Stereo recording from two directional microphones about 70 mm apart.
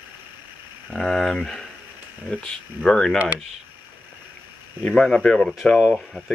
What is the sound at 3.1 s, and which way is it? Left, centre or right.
Speech, right.